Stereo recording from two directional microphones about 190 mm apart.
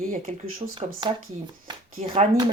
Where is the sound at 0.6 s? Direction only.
25° right (ahead or behind).